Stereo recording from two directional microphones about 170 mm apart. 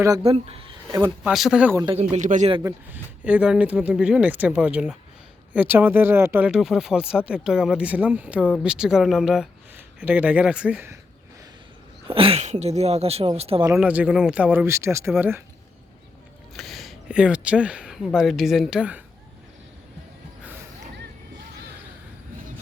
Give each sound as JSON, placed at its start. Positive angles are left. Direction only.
{"t": 0.2, "sound": "speech", "side_deg": -35}
{"t": 0.9, "sound": "speech", "side_deg": -20}
{"t": 1.2, "sound": "speech", "side_deg": -5}
{"t": 2.0, "sound": "speech", "side_deg": -40}
{"t": 2.6, "sound": "speech", "side_deg": -10}
{"t": 12.0, "sound": "speech", "side_deg": -30}
{"t": 13.7, "sound": "speech", "side_deg": -10}
{"t": 16.6, "sound": "speech", "side_deg": 0}
{"t": 20.4, "sound": "music", "side_deg": -10}